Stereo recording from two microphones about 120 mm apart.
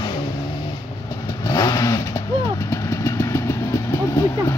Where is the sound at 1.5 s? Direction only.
30° left (ahead or behind).